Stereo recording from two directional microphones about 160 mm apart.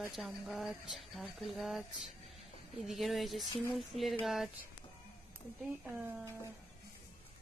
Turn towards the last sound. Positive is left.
turn(degrees=-10)  # may be behind; listen again after turning